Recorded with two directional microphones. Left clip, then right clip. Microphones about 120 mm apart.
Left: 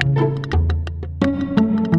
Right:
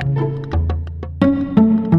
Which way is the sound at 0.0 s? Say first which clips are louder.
Left 3 dB; centre (ahead or behind).